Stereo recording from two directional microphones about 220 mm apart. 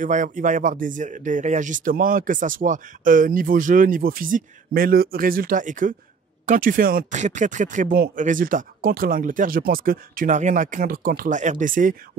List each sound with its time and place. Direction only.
0.0 s speech: 35° right (ahead or behind)